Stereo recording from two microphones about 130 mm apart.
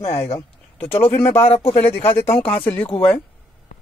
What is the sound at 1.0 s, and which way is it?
Speech, 15° left (ahead or behind).